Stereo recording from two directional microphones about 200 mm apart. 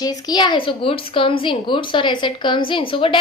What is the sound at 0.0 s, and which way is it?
A woman's voice, 20° left (ahead or behind).